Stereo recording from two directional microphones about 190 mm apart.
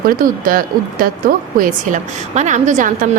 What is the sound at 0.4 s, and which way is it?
Speech, 50° right (ahead or behind).